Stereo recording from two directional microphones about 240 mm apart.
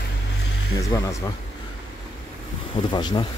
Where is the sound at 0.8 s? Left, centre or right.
Centre.